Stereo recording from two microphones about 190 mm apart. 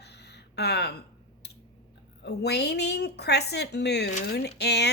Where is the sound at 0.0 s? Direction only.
60° left (ahead or behind).